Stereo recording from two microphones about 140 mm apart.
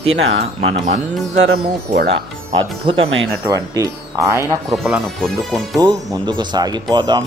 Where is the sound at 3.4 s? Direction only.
25° right (ahead or behind).